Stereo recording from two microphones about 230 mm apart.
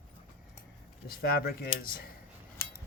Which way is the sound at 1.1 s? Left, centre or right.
Left.